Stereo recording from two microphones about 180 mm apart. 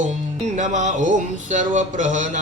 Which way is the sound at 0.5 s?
45° right (ahead or behind).